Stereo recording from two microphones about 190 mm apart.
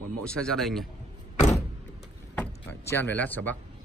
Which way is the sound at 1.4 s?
40° left (ahead or behind).